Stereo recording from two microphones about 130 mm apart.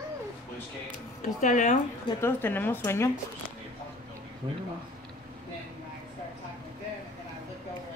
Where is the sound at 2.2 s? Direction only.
15° left (ahead or behind).